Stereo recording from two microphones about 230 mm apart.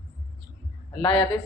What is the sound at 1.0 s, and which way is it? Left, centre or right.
Speech, left.